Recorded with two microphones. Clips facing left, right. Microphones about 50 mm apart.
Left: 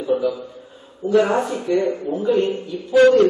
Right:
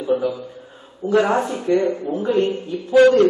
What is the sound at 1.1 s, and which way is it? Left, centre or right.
A man's voice, right.